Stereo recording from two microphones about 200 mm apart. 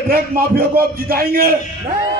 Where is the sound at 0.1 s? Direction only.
50° right (ahead or behind).